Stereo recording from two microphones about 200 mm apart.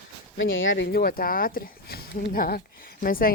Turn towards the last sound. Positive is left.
turn(degrees=45)  # may be behind; listen again after turning